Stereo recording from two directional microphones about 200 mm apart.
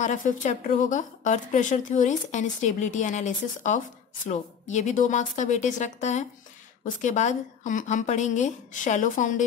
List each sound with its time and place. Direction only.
0.0 s speech: 40° left (ahead or behind)